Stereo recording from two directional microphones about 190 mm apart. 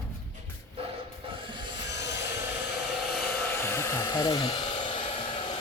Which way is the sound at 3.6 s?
15° left (ahead or behind).